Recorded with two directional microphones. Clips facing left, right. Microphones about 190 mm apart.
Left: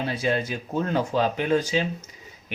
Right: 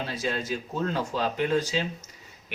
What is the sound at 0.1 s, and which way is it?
Speech, 60° left (ahead or behind).